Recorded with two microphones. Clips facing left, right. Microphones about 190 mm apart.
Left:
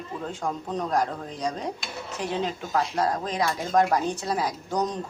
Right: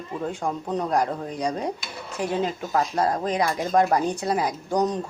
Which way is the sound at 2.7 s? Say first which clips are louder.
Right 2 dB; 10° right (ahead or behind).